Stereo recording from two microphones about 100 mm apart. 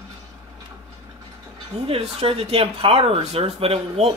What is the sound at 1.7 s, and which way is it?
Speech, 80° right.